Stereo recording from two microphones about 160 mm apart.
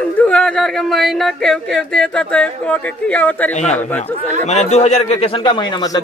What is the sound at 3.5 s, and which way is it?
A man's voice, 45° left (ahead or behind).